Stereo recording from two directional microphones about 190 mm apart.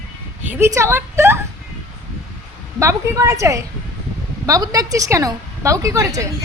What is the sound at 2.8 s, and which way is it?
A woman's voice, 15° right (ahead or behind).